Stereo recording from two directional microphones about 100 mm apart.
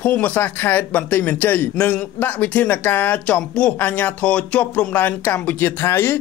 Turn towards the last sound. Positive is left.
turn(degrees=25)  # may be behind; listen again after turning